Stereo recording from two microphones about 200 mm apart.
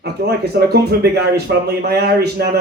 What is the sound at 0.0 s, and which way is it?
Speech, 55° right (ahead or behind).